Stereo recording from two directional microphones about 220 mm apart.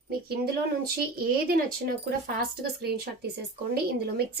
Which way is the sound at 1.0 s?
45° right (ahead or behind).